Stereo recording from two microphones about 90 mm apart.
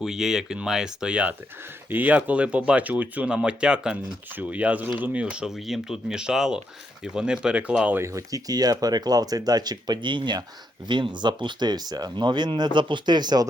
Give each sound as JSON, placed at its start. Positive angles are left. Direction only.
{"t": 0.0, "sound": "speech", "side_deg": -5}
{"t": 7.9, "sound": "speech", "side_deg": -35}